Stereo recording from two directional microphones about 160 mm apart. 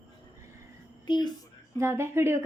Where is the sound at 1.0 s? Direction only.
30° left (ahead or behind).